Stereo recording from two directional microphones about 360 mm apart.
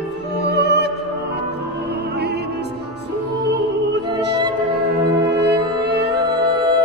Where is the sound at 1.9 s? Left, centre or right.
Right.